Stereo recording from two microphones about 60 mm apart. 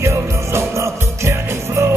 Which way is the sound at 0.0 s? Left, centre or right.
Right.